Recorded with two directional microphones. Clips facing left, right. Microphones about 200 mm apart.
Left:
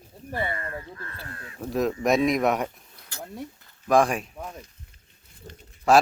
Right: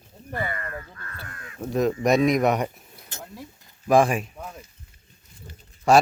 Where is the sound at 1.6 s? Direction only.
Centre (ahead or behind).